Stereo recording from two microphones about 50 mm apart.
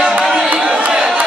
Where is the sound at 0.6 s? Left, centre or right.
Right.